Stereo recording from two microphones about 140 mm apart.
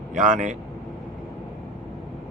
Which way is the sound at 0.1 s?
65° right (ahead or behind).